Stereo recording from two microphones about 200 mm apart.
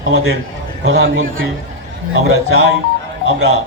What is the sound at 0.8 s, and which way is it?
Speech, 70° right (ahead or behind).